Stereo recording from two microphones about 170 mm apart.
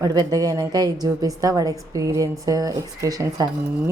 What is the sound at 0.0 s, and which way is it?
A woman's voice, 20° right (ahead or behind).